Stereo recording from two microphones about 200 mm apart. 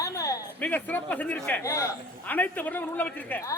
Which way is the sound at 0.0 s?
15° left (ahead or behind).